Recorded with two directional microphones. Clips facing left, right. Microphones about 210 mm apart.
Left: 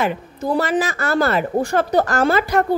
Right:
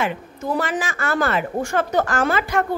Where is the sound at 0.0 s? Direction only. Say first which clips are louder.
Left 3 dB; 35° left (ahead or behind).